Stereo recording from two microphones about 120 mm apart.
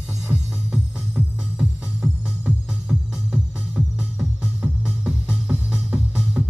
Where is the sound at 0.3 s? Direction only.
10° right (ahead or behind).